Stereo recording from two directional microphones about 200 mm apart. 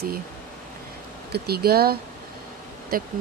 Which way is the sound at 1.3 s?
50° right (ahead or behind).